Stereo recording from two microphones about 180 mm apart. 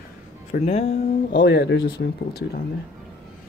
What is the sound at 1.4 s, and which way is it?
Speech, 70° left (ahead or behind).